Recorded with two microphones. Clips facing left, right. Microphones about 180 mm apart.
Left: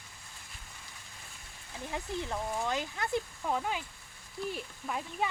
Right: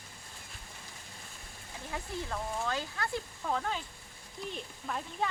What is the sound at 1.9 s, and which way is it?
Speech, 20° left (ahead or behind).